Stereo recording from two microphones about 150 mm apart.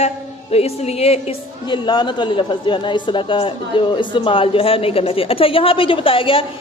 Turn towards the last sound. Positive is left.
turn(degrees=35)  # may be behind; listen again after turning